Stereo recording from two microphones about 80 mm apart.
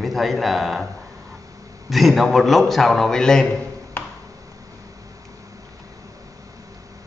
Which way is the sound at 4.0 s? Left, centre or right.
Left.